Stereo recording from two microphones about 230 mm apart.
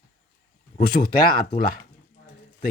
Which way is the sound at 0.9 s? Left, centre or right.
Left.